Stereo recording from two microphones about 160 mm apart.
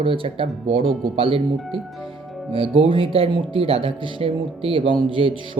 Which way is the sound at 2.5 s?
35° right (ahead or behind).